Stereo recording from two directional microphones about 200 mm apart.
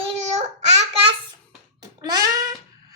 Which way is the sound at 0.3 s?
35° right (ahead or behind).